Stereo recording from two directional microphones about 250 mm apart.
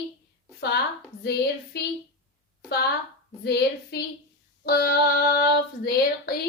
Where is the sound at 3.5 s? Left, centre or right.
Left.